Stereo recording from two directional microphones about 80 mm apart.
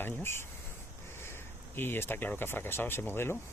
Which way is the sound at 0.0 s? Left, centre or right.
Left.